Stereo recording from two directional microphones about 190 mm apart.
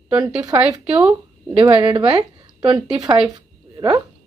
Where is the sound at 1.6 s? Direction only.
20° right (ahead or behind).